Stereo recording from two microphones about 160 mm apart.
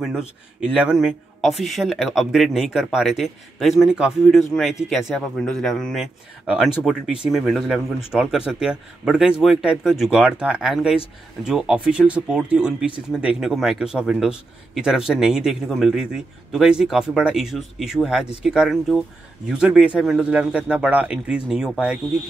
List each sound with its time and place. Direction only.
0.0 s a man's voice: 5° right (ahead or behind)